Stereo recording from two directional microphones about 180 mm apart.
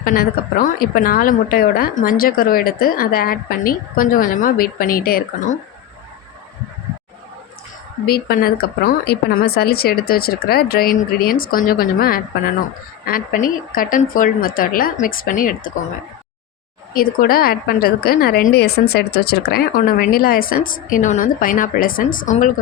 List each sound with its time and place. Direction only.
0.0 s a woman's voice: 50° left (ahead or behind)
8.0 s a woman's voice: 60° left (ahead or behind)
16.9 s a woman's voice: 55° left (ahead or behind)